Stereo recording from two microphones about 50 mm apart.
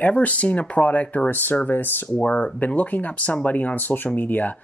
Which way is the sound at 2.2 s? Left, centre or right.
Left.